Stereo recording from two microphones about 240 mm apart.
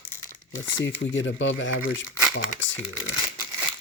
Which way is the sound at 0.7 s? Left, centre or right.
Left.